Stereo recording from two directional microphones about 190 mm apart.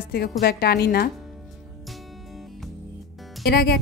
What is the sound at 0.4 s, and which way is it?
Speech, 55° left (ahead or behind).